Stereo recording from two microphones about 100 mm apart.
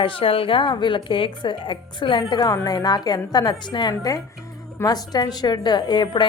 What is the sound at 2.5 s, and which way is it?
A woman's voice, 40° left (ahead or behind).